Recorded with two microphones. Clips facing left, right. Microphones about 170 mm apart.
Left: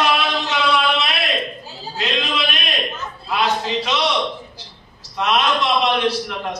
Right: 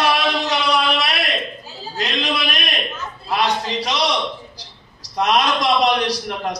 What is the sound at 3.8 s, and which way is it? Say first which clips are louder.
Speech: even; 35° right (ahead or behind).